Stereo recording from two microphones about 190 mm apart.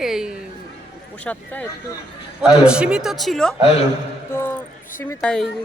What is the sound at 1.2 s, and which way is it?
Speech, 5° left (ahead or behind).